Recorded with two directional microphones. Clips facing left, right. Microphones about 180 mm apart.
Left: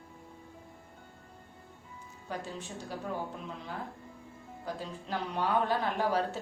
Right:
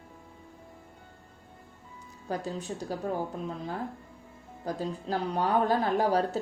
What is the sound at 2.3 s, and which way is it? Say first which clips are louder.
Speech: right 6 dB; 40° right (ahead or behind).